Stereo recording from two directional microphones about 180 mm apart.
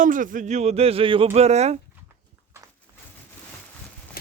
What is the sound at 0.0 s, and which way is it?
Speech, 45° right (ahead or behind).